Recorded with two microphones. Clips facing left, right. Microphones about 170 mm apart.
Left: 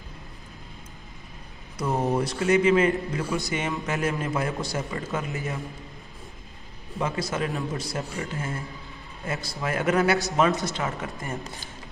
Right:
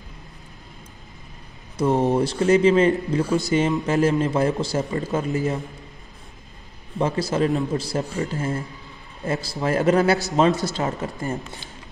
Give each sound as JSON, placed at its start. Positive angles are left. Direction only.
{"t": 2.0, "sound": "a man's voice", "side_deg": -30}
{"t": 7.0, "sound": "a man's voice", "side_deg": -30}